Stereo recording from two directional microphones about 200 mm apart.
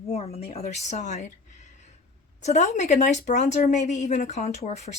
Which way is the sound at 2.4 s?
35° left (ahead or behind).